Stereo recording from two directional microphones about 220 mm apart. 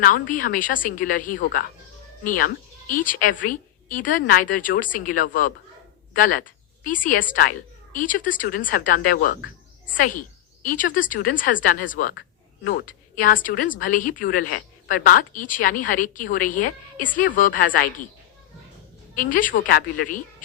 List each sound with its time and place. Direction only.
0.0 s speech: 35° left (ahead or behind)
2.9 s speech: 35° left (ahead or behind)
19.1 s speech: 35° left (ahead or behind)